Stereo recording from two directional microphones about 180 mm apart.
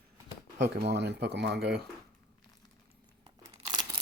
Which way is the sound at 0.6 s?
70° right (ahead or behind).